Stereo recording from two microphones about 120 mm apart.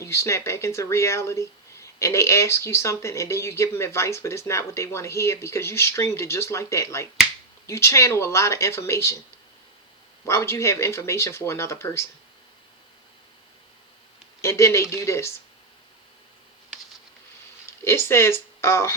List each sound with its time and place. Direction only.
0.0 s speech: 25° left (ahead or behind)
10.2 s speech: 20° left (ahead or behind)
14.4 s speech: 20° left (ahead or behind)
17.7 s speech: 20° left (ahead or behind)